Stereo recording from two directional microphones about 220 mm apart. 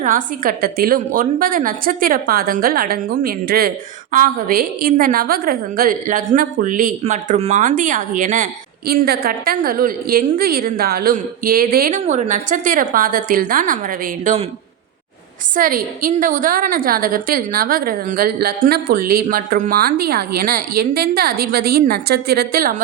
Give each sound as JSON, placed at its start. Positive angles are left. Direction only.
{"t": 0.0, "sound": "a woman's voice", "side_deg": -40}
{"t": 15.5, "sound": "a woman's voice", "side_deg": -40}